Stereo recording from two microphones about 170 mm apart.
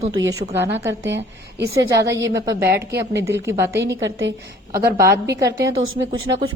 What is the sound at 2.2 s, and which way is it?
A woman's voice, 20° right (ahead or behind).